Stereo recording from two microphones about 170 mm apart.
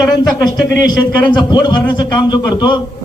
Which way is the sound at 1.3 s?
25° left (ahead or behind).